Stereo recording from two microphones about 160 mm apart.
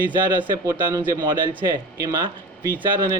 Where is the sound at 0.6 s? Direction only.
20° right (ahead or behind).